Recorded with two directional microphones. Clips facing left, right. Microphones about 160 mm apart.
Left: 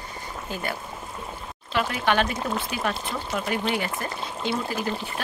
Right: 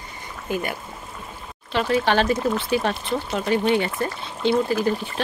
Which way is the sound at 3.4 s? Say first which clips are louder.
Right 8 dB; 25° right (ahead or behind).